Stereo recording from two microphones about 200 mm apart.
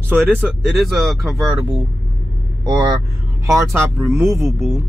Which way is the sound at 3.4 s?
15° right (ahead or behind).